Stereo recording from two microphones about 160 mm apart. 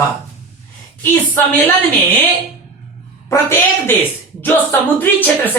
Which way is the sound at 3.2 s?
15° left (ahead or behind).